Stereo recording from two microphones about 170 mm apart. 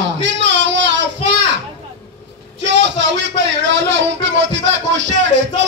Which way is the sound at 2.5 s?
90° right.